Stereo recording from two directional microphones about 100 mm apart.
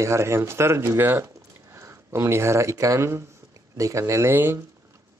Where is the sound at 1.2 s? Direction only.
30° right (ahead or behind).